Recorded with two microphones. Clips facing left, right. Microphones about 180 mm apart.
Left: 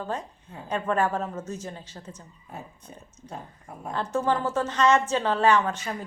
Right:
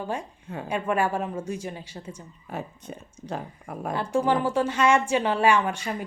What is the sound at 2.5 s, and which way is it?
Speech, 90° right.